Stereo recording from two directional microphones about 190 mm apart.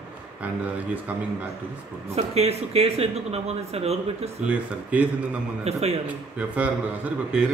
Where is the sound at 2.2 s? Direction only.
35° right (ahead or behind).